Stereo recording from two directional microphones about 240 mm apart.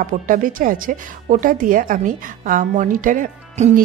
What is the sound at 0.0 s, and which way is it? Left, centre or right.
Speech, right.